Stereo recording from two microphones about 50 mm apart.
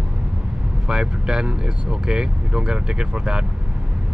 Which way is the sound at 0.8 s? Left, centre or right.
Centre.